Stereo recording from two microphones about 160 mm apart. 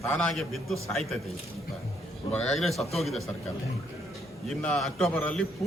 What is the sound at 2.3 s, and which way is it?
Speech, 5° left (ahead or behind).